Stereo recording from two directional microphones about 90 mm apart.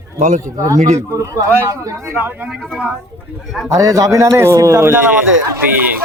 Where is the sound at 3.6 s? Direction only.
35° right (ahead or behind).